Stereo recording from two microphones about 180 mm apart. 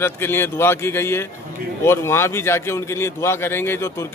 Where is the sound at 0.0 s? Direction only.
15° left (ahead or behind).